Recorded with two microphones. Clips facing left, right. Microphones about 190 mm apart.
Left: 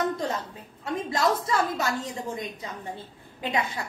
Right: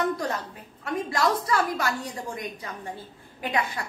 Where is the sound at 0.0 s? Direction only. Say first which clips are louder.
Even; 25° left (ahead or behind).